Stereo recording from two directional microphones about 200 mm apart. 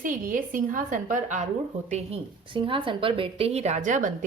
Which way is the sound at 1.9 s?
30° right (ahead or behind).